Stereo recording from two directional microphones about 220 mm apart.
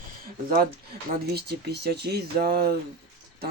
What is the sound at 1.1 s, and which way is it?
Speech, 45° right (ahead or behind).